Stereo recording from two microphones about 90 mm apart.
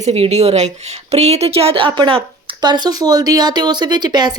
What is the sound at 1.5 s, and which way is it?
A woman's voice, 90° right.